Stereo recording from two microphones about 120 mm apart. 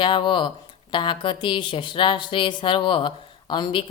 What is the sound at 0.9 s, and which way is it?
Speech, 45° left (ahead or behind).